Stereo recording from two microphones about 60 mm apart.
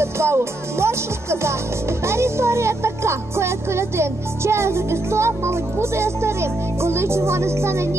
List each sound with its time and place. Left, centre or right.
0.0 s music: right